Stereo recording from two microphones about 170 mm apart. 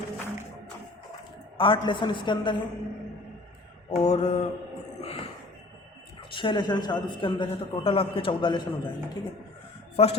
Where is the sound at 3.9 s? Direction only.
40° left (ahead or behind).